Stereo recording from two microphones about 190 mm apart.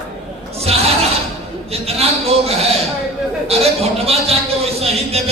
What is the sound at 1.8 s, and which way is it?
A man's voice, 30° right (ahead or behind).